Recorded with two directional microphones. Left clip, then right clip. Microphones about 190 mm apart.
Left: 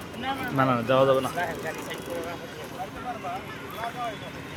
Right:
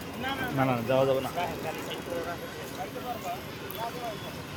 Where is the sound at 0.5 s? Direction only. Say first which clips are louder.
Left 5 dB; 20° left (ahead or behind).